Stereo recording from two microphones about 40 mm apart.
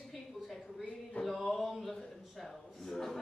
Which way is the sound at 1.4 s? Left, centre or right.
Centre.